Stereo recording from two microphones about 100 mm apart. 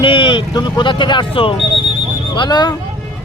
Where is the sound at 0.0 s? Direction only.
55° left (ahead or behind).